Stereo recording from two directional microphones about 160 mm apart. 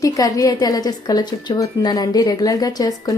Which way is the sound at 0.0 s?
20° left (ahead or behind).